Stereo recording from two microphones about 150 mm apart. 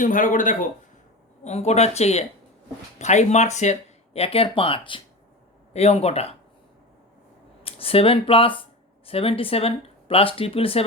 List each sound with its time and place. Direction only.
0.0 s speech: 60° left (ahead or behind)
1.5 s speech: 45° left (ahead or behind)
7.6 s speech: 40° left (ahead or behind)